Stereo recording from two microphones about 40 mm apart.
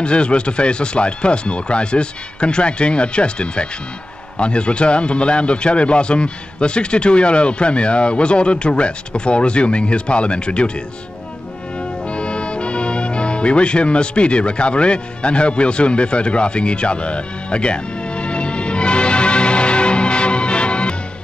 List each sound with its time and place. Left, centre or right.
0.0 s a man's voice: left
12.0 s music: left